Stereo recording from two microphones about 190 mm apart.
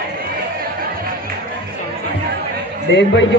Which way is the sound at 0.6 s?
50° right (ahead or behind).